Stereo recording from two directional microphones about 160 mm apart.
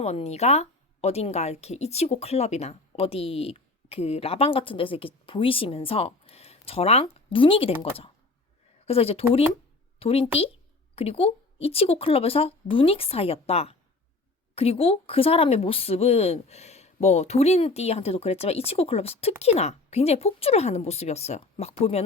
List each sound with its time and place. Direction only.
0.0 s speech: 40° left (ahead or behind)